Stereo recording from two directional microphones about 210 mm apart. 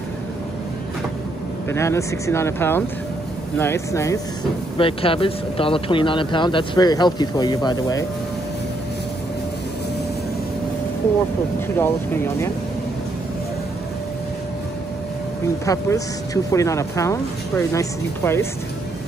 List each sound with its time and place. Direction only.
1.7 s speech: 15° left (ahead or behind)
4.7 s speech: 25° left (ahead or behind)
11.6 s speech: 10° left (ahead or behind)
15.6 s speech: 15° left (ahead or behind)